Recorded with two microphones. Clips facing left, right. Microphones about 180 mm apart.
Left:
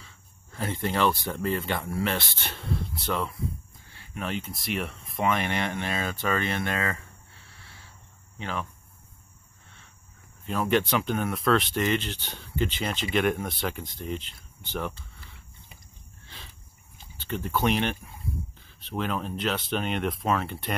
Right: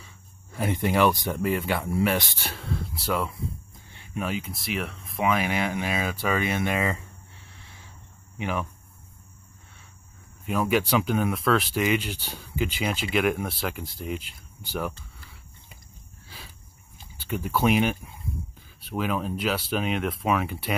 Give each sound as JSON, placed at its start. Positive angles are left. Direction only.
{"t": 0.0, "sound": "speech", "side_deg": -15}
{"t": 3.3, "sound": "cricket", "side_deg": -25}
{"t": 4.3, "sound": "speech", "side_deg": 0}
{"t": 7.5, "sound": "cricket", "side_deg": -15}
{"t": 8.4, "sound": "speech", "side_deg": -15}
{"t": 10.4, "sound": "speech", "side_deg": -10}
{"t": 16.3, "sound": "a sound", "side_deg": -5}
{"t": 17.2, "sound": "speech", "side_deg": -10}